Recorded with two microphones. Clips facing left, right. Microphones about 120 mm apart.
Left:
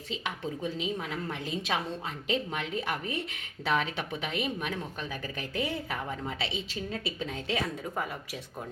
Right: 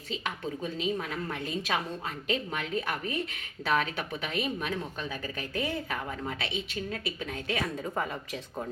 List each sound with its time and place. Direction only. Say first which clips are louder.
0.6 s a woman's voice: right 2 dB; 20° left (ahead or behind)
6.4 s a woman's voice: even; 30° left (ahead or behind)
7.9 s speech: right 2 dB; 5° left (ahead or behind)